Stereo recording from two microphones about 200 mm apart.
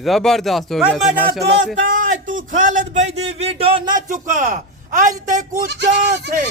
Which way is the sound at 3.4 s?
30° right (ahead or behind).